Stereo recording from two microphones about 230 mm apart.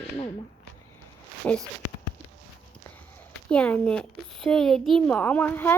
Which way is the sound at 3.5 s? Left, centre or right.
Centre.